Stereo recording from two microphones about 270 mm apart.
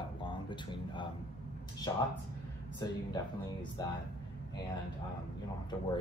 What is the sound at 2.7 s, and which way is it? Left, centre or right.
A man's voice, centre.